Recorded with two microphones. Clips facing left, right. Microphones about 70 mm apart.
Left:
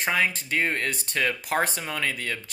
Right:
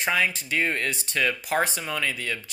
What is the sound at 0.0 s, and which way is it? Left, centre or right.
Speech, left.